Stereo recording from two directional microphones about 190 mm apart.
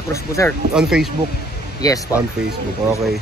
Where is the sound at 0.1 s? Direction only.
15° left (ahead or behind).